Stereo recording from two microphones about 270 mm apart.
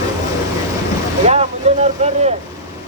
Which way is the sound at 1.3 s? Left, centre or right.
Right.